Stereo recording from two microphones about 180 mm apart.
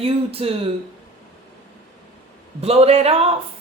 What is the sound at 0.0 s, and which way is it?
Speech, 35° right (ahead or behind).